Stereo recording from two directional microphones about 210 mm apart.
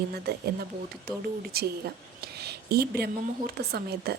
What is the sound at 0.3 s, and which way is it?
Speech, 50° right (ahead or behind).